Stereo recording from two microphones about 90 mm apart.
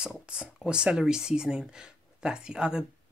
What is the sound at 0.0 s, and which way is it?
Speech, 10° right (ahead or behind).